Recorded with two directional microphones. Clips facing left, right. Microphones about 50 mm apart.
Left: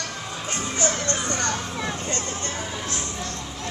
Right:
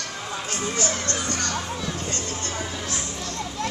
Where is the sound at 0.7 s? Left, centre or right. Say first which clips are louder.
Left 4 dB; left.